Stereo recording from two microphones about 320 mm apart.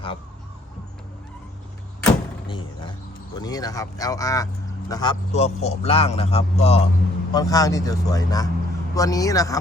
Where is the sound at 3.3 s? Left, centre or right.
Centre.